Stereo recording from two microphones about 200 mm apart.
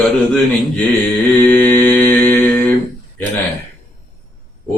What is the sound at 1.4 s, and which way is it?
Mantra, 10° left (ahead or behind).